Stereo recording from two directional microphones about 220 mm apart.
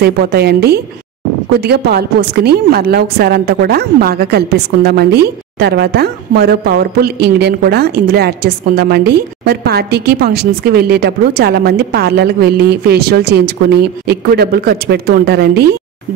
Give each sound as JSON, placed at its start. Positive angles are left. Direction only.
{"t": 0.0, "sound": "a woman's voice", "side_deg": -45}